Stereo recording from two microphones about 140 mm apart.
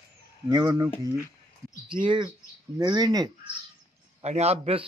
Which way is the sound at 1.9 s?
35° right (ahead or behind).